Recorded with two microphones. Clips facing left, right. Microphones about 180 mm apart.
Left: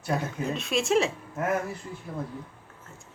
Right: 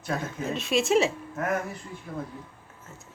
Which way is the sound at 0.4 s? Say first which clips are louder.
Right 4 dB; centre (ahead or behind).